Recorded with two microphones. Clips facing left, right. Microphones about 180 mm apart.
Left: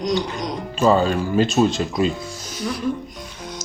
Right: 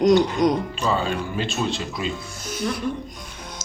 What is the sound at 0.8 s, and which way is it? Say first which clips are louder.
Speech: left 7 dB; 45° left (ahead or behind).